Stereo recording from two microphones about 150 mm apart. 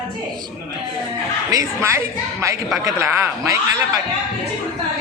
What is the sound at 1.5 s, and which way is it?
A woman's voice, 20° right (ahead or behind).